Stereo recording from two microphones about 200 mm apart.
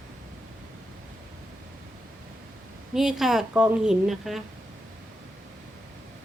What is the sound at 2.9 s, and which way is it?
A woman's voice, 5° right (ahead or behind).